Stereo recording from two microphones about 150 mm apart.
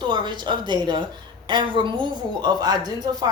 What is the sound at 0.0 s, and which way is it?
A woman's voice, 30° right (ahead or behind).